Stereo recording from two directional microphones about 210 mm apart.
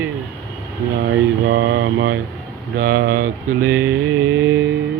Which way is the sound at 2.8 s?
45° right (ahead or behind).